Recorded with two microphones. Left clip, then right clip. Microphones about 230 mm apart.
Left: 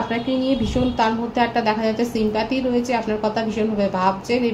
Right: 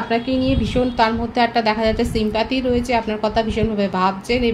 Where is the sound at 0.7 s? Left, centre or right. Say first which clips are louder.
Right 2 dB; right.